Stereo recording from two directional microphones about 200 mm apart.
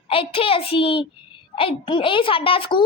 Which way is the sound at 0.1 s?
25° left (ahead or behind).